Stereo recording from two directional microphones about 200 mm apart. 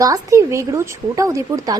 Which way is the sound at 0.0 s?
15° right (ahead or behind).